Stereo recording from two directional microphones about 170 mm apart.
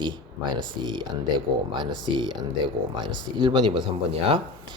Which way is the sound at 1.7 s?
25° right (ahead or behind).